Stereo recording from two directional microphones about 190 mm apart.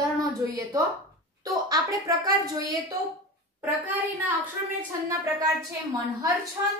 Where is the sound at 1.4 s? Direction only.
20° right (ahead or behind).